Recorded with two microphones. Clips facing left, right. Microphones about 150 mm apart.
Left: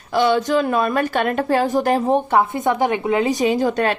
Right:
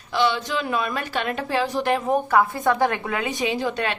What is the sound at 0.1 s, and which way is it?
A woman's voice, 45° left (ahead or behind).